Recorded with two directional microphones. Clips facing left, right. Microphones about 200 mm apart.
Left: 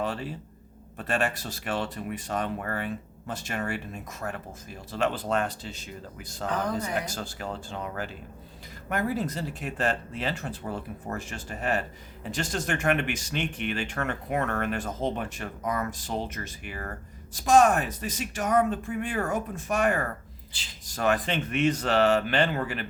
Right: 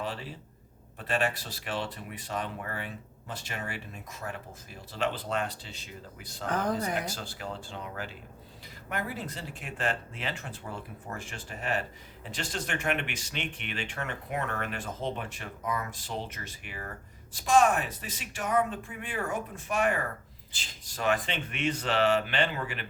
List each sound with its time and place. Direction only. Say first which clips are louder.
0.0 s speech: left 5 dB; 45° left (ahead or behind)